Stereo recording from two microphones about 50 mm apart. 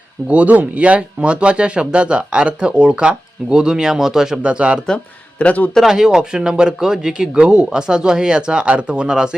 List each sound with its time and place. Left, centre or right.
0.3 s speech: right; by 4.4 s centre
4.4 s speech: right
5.4 s a man's voice: left
5.8 s speech: centre